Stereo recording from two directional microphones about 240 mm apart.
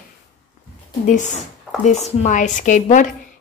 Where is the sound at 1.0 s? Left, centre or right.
Left.